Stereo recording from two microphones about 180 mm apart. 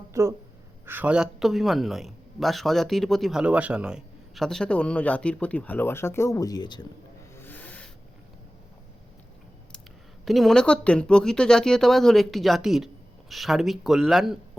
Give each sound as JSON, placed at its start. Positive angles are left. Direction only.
{"t": 0.1, "sound": "a woman's voice", "side_deg": -15}
{"t": 7.3, "sound": "a sound", "side_deg": 10}
{"t": 10.2, "sound": "a man's voice", "side_deg": 0}